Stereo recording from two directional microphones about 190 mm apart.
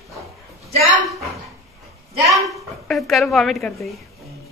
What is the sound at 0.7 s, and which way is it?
Speech, 40° right (ahead or behind).